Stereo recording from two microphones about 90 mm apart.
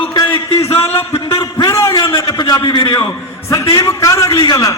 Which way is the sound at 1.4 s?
40° left (ahead or behind).